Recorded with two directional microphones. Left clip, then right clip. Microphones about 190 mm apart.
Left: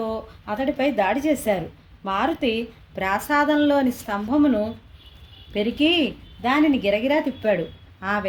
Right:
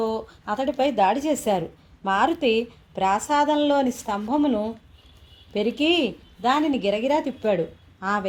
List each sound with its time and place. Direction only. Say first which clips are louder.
0.0 s a woman's voice: right 2 dB; 40° right (ahead or behind)